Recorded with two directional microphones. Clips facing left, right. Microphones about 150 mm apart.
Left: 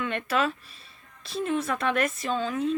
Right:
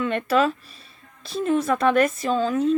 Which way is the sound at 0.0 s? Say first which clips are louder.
Right 6 dB; 40° right (ahead or behind).